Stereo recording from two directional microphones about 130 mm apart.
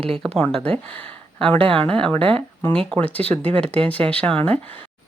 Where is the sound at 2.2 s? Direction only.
45° right (ahead or behind).